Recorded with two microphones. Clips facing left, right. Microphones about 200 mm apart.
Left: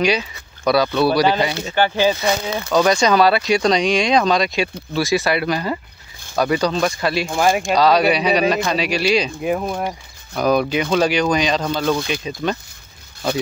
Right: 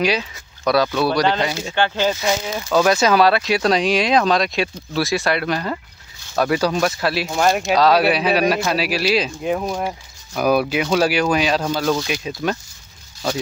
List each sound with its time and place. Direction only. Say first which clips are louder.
0.0 s speech: left 1 dB; centre (ahead or behind)
2.3 s speech: left 1 dB; 60° left (ahead or behind)
2.7 s speech: even; 5° right (ahead or behind)